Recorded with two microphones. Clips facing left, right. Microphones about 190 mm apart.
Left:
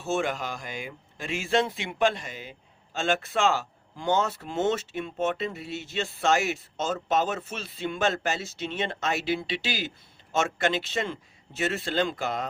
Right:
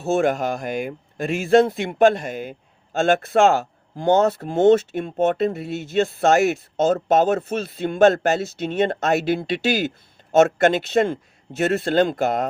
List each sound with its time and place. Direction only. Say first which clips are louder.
0.1 s speech: right 9 dB; 45° right (ahead or behind)